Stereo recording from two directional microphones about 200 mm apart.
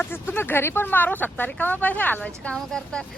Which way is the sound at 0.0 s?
10° left (ahead or behind).